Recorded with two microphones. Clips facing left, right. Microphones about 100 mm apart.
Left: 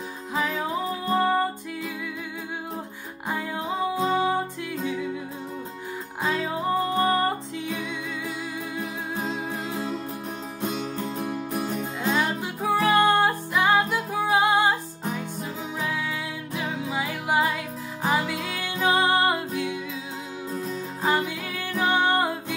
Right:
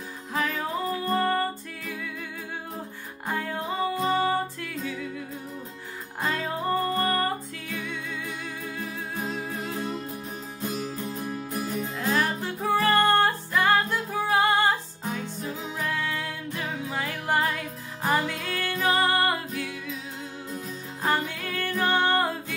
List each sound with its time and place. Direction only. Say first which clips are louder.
0.3 s music: left 2 dB; 10° left (ahead or behind)
3.3 s music: left 1 dB; 5° left (ahead or behind)
6.2 s music: left 2 dB; centre (ahead or behind)
7.0 s music: left 3 dB; 20° left (ahead or behind)
9.1 s music: left 2 dB; 30° left (ahead or behind)
11.2 s music: left 3 dB; 70° left (ahead or behind)
12.2 s music: left 1 dB; 15° left (ahead or behind)
15.1 s music: left 1 dB; 5° left (ahead or behind); by 19.8 s 20° left (ahead or behind)
21.0 s music: left 2 dB; 10° left (ahead or behind)